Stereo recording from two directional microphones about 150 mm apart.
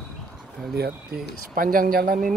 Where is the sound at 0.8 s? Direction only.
90° right.